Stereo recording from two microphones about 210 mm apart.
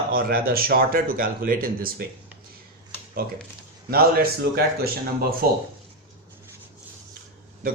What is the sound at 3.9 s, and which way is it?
Speech, 45° right (ahead or behind).